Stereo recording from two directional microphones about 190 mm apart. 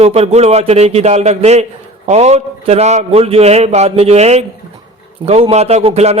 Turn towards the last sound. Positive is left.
turn(degrees=-35)  # may be behind; listen again after turning